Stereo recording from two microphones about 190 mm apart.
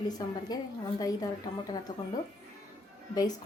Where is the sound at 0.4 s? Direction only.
20° left (ahead or behind).